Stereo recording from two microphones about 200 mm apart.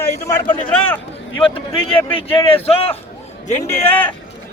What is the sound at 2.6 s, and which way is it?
Speech, 30° left (ahead or behind).